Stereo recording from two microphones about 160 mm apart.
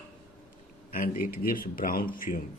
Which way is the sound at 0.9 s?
60° left (ahead or behind).